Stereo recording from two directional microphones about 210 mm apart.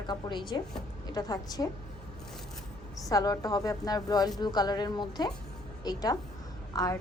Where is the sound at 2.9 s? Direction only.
15° left (ahead or behind).